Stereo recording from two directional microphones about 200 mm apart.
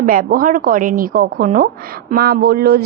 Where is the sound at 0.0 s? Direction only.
45° right (ahead or behind).